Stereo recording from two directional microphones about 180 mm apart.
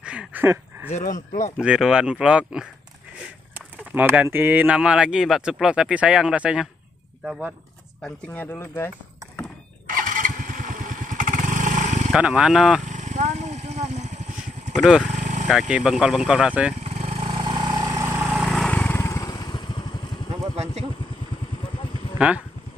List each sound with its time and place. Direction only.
0.0 s a sound: 5° right (ahead or behind)
0.9 s speech: 45° left (ahead or behind)
1.6 s speech: 5° right (ahead or behind)
8.0 s speech: 10° left (ahead or behind)
9.8 s motorcycle: 50° right (ahead or behind)
12.1 s speech: 5° right (ahead or behind)
12.8 s vehicle: 40° right (ahead or behind)
14.8 s speech: 5° right (ahead or behind)
15.1 s vehicle: 40° right (ahead or behind)
15.7 s speech: 5° right (ahead or behind)
16.8 s vehicle: 35° right (ahead or behind); by 18.2 s 15° right (ahead or behind)
18.2 s vehicle: centre (ahead or behind); by 20.0 s 25° left (ahead or behind)
20.5 s vehicle: 35° right (ahead or behind)
21.7 s a sound: 30° left (ahead or behind)